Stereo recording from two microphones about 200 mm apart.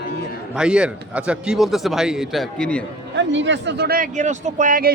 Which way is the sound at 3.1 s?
65° right (ahead or behind).